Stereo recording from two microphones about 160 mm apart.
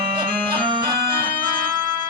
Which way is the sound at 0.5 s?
30° right (ahead or behind).